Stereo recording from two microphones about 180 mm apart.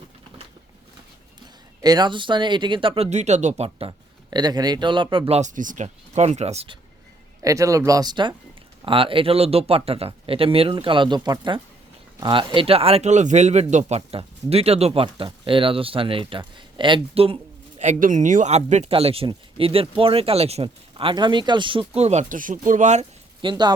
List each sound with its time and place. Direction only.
1.8 s speech: 20° right (ahead or behind)
7.4 s speech: 20° right (ahead or behind); by 23.0 s 40° right (ahead or behind)
23.4 s speech: 25° right (ahead or behind)